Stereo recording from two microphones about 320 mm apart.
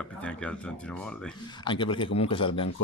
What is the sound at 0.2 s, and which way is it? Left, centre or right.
Speech, centre.